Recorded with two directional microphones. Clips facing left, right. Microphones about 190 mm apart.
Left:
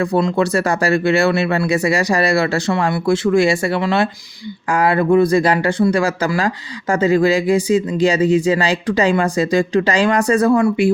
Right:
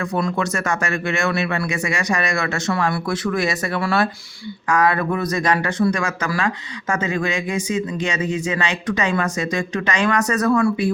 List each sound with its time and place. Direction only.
0.0 s speech: 30° left (ahead or behind)